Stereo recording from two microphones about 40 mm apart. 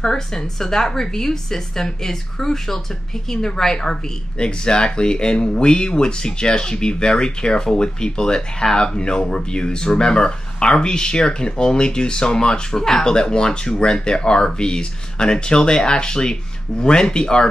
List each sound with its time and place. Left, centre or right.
0.0 s a woman's voice: centre